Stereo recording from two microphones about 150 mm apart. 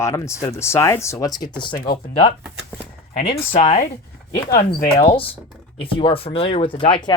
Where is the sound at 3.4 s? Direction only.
70° left (ahead or behind).